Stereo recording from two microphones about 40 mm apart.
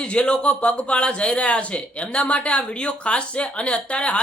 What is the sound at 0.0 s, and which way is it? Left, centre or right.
Speech, left.